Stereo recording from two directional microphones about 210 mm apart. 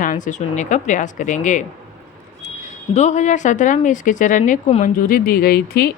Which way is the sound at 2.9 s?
35° left (ahead or behind).